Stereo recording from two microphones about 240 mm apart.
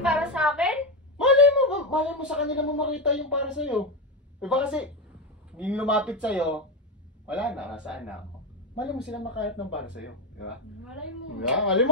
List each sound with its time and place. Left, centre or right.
0.0 s a sound: centre
2.8 s speech: centre
9.9 s speech: left
10.9 s speech: centre